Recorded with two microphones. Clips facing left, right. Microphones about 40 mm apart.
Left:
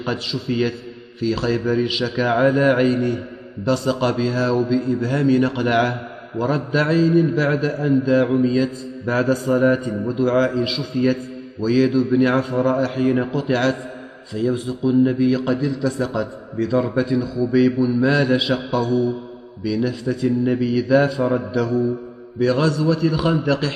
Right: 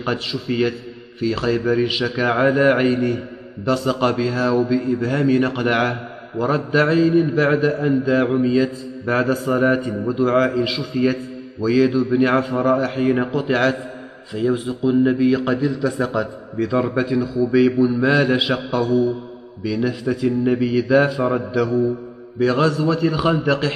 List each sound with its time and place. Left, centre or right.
0.0 s a man's voice: centre
10.6 s a man's voice: centre
10.9 s a man's voice: centre
18.7 s a man's voice: centre
21.5 s a man's voice: centre